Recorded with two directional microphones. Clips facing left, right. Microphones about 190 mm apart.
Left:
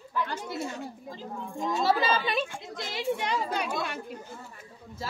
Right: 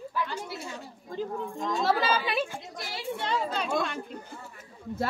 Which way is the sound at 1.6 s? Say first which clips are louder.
Left 1 dB; centre (ahead or behind).